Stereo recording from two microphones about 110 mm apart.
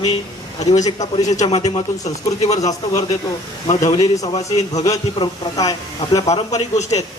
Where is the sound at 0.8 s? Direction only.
35° left (ahead or behind).